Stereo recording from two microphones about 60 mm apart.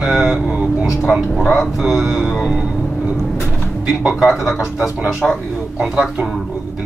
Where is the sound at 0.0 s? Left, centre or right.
Centre.